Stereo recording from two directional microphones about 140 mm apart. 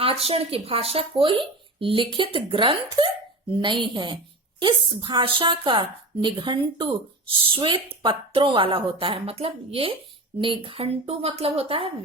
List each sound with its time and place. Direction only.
0.0 s a woman's voice: 45° right (ahead or behind)